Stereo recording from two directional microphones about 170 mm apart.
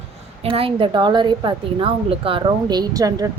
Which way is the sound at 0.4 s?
30° right (ahead or behind).